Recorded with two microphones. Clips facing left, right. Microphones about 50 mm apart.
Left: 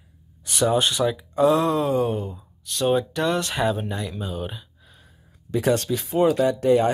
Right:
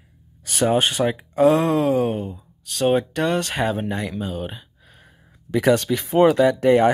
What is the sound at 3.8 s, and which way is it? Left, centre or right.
Speech, right.